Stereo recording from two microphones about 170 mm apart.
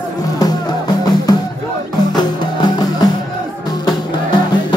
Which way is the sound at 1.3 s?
20° left (ahead or behind).